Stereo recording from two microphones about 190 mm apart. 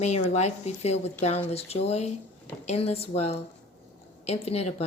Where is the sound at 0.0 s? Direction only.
35° left (ahead or behind).